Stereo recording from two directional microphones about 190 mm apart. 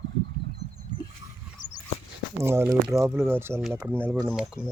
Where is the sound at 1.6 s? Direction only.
90° left.